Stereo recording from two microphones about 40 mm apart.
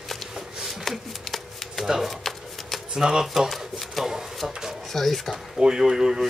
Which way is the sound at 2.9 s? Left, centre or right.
Centre.